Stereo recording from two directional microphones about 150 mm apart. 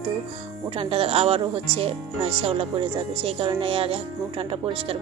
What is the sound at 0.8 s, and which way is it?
Speech, 40° right (ahead or behind).